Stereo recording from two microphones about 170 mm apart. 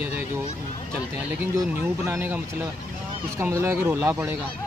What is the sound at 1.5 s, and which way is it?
Speech, 15° right (ahead or behind).